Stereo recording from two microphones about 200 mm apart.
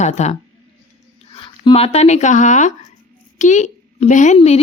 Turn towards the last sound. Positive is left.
turn(degrees=35)  # may be behind; listen again after turning